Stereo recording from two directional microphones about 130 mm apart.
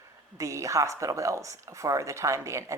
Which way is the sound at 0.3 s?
25° right (ahead or behind).